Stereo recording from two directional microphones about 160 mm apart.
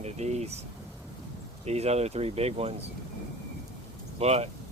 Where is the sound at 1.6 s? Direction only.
40° right (ahead or behind).